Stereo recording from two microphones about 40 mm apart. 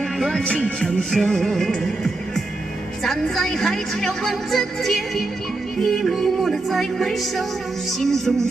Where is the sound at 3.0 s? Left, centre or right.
Centre.